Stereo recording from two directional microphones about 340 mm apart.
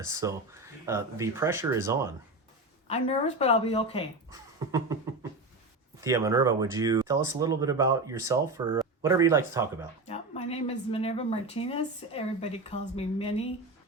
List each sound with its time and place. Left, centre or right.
0.0 s speech: centre
2.8 s speech: centre
4.3 s a sound: centre
6.0 s speech: centre
10.1 s speech: centre